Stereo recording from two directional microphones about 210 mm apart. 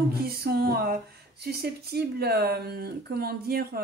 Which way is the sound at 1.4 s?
50° right (ahead or behind).